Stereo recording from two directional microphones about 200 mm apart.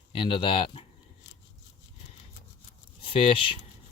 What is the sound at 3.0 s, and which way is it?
Speech, 25° left (ahead or behind).